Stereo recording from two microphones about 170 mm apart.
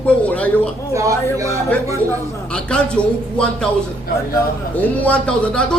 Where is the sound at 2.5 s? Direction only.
5° left (ahead or behind).